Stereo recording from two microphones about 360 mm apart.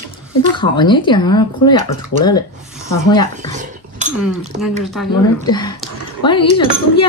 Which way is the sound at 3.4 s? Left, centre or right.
Centre.